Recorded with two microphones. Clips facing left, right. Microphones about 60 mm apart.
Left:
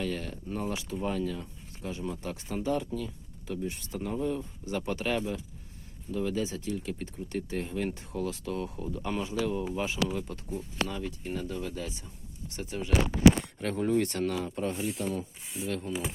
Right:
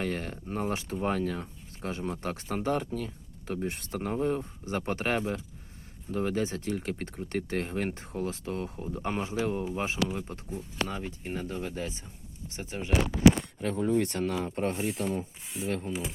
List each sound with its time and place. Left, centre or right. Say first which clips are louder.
0.0 s speech: right 1 dB; right
13.6 s speech: right 1 dB; left
13.9 s speech: left 1 dB; right